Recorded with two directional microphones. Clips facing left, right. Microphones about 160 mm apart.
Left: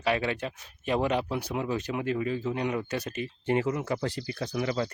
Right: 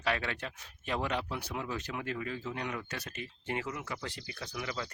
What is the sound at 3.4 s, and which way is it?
Speech, 30° left (ahead or behind).